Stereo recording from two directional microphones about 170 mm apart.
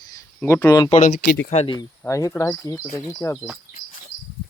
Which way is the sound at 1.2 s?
80° left.